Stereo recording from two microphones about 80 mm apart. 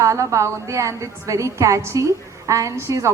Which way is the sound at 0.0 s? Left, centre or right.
Right.